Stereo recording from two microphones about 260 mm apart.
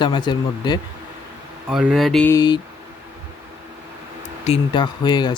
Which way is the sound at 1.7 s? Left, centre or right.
Centre.